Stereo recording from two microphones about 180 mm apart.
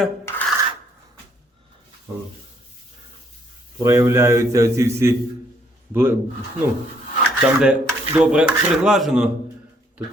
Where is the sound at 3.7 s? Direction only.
15° right (ahead or behind).